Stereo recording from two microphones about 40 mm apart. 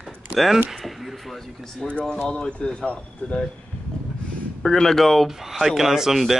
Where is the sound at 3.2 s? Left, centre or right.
Left.